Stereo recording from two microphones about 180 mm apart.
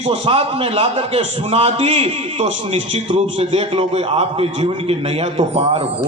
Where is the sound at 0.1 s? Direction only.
30° right (ahead or behind).